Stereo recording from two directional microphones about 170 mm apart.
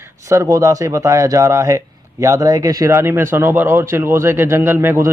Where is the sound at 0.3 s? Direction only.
20° right (ahead or behind).